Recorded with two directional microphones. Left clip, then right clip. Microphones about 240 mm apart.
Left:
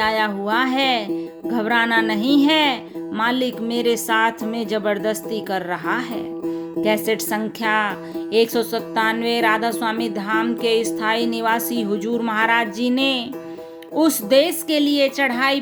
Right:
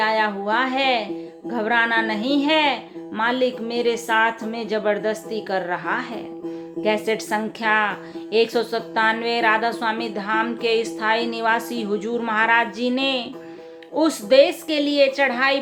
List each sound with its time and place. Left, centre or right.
0.0 s speech: left